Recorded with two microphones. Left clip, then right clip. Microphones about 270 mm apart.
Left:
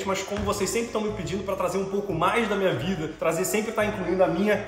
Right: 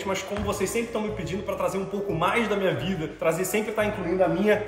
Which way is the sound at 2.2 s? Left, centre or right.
Centre.